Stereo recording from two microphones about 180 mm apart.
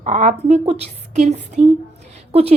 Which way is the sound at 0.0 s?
40° right (ahead or behind).